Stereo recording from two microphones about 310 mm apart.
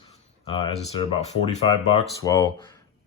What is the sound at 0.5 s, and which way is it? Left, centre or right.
Speech, centre.